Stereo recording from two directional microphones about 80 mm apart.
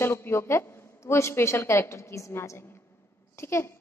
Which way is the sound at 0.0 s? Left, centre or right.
Left.